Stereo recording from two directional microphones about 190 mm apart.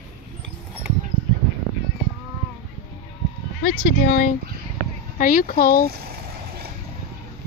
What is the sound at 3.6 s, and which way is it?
Speech, 55° left (ahead or behind).